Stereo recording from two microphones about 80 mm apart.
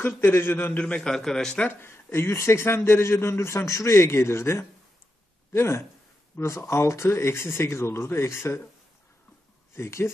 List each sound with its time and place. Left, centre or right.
0.0 s a man's voice: left; by 1.7 s centre
1.7 s speech: left
9.8 s speech: left